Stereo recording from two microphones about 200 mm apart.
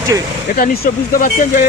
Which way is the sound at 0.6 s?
45° left (ahead or behind).